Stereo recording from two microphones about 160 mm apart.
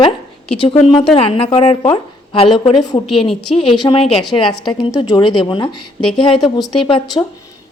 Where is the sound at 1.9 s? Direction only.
35° left (ahead or behind).